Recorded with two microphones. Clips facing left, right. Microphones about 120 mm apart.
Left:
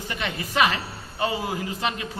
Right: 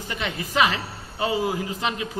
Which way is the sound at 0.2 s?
15° right (ahead or behind).